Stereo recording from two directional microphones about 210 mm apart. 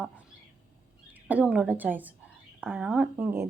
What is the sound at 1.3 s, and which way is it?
Speech, 5° right (ahead or behind).